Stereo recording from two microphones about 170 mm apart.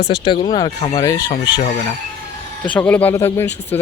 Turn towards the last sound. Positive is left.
turn(degrees=15)  # may be behind; listen again after turning